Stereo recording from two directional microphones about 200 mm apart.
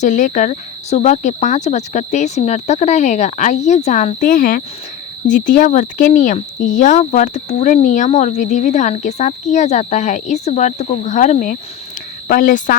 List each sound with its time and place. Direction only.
0.0 s speech: 40° left (ahead or behind)